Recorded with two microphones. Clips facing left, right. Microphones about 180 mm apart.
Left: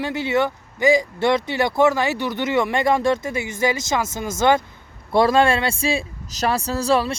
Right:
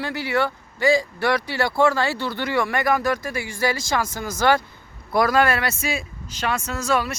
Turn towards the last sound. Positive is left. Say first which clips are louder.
# left 4 dB
turn(degrees=30)  # may be behind; listen again after turning